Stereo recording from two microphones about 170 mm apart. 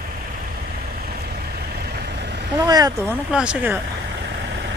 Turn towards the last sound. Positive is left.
turn(degrees=-10)  # may be behind; listen again after turning